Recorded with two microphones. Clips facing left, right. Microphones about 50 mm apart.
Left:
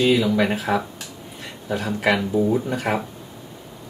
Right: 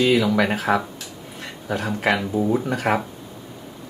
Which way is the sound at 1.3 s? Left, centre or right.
Right.